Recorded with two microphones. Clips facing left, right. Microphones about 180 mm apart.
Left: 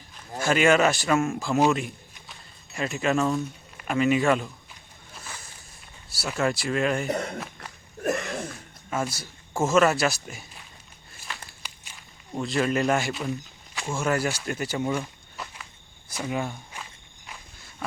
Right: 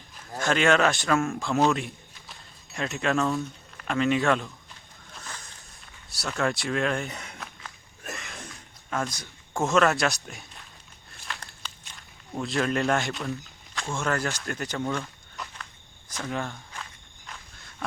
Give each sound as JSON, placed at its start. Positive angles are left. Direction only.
{"t": 0.3, "sound": "speech", "side_deg": 5}
{"t": 2.2, "sound": "a sound", "side_deg": 0}
{"t": 3.4, "sound": "speech", "side_deg": 5}
{"t": 5.1, "sound": "boat", "side_deg": 5}
{"t": 6.1, "sound": "speech", "side_deg": 0}
{"t": 7.1, "sound": "speech", "side_deg": 60}
{"t": 7.6, "sound": "a sound", "side_deg": 70}
{"t": 8.0, "sound": "throat clearing", "side_deg": 60}
{"t": 8.9, "sound": "speech", "side_deg": 5}
{"t": 11.1, "sound": "walk", "side_deg": 0}
{"t": 13.9, "sound": "speech", "side_deg": 10}
{"t": 15.4, "sound": "walk", "side_deg": 0}
{"t": 16.0, "sound": "speech", "side_deg": 10}